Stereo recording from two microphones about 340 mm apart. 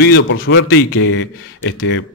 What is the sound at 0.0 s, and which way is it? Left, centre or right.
A man's voice, left.